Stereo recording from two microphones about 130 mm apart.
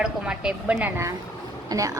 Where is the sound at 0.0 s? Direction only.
5° right (ahead or behind).